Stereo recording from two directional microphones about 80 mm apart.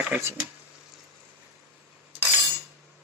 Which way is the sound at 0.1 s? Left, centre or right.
Centre.